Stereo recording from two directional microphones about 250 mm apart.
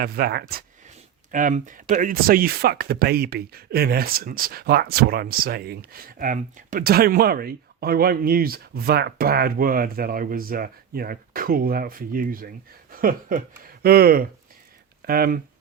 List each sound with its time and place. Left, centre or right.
0.0 s speech: right